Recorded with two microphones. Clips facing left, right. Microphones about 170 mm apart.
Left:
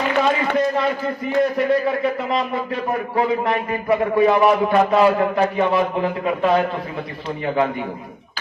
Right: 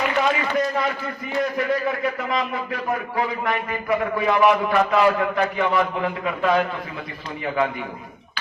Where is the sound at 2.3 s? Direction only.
30° left (ahead or behind).